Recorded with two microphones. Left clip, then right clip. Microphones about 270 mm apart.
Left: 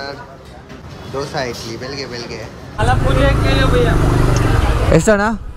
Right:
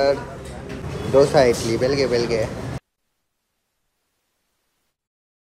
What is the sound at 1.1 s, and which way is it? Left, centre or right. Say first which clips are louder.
Speech: right 8 dB; centre.